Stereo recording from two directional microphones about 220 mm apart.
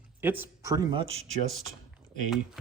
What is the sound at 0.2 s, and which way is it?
A man's voice, 10° right (ahead or behind).